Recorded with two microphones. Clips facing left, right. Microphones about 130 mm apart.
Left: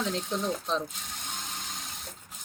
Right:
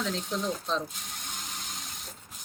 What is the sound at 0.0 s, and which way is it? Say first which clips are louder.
Speech: left 1 dB; 20° left (ahead or behind).